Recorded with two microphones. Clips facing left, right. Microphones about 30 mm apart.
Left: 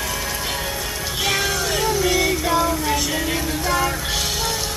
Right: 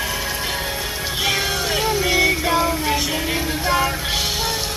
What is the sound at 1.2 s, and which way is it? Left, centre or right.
Music, centre.